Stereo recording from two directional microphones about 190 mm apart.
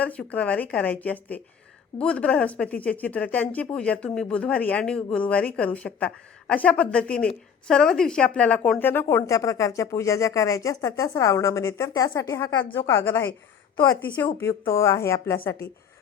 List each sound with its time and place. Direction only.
0.0 s a woman's voice: 5° left (ahead or behind)